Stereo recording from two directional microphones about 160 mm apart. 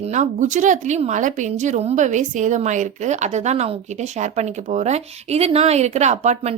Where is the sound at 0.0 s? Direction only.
50° right (ahead or behind).